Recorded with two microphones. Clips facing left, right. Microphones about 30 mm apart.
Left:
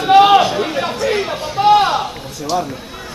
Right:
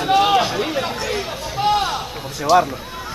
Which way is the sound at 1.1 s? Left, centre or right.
Centre.